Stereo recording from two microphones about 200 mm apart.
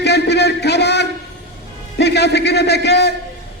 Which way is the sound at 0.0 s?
55° left (ahead or behind).